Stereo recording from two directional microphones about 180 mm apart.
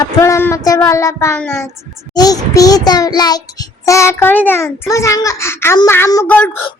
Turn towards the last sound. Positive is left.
turn(degrees=15)  # may be behind; listen again after turning